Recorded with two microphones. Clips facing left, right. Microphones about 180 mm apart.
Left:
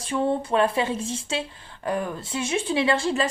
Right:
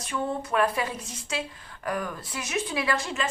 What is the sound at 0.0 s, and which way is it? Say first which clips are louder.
A woman's voice: left 6 dB; 30° left (ahead or behind).